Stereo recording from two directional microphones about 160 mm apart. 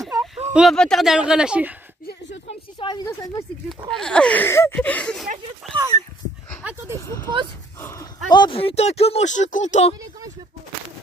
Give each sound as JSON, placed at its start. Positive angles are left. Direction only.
{"t": 0.5, "sound": "speech", "side_deg": -5}
{"t": 2.8, "sound": "speech", "side_deg": 25}
{"t": 3.9, "sound": "speech", "side_deg": 5}
{"t": 6.6, "sound": "speech", "side_deg": -10}
{"t": 7.1, "sound": "speech", "side_deg": 15}